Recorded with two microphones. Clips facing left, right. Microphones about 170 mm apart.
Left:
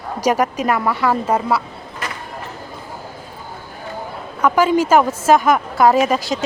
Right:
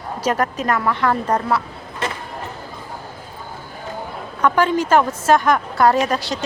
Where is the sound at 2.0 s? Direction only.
25° right (ahead or behind).